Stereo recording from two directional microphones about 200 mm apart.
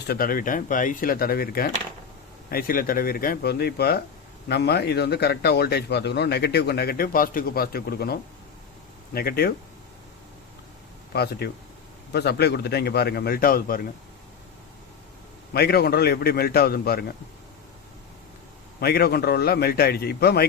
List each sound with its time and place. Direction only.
0.1 s a man's voice: 45° left (ahead or behind)
11.1 s a man's voice: 55° left (ahead or behind)
15.5 s a man's voice: 50° left (ahead or behind)
18.8 s a man's voice: 50° left (ahead or behind)